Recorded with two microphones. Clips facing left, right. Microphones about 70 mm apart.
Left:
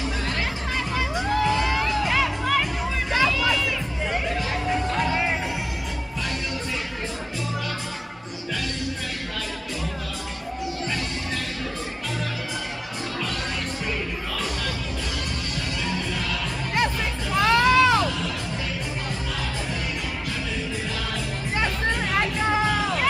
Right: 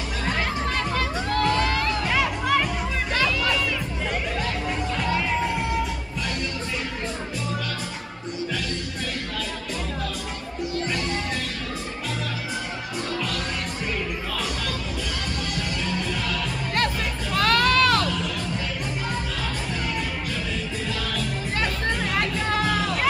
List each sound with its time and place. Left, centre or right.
0.9 s crowd: centre
2.1 s music: centre
4.9 s music: left
16.7 s music: centre
22.2 s music: centre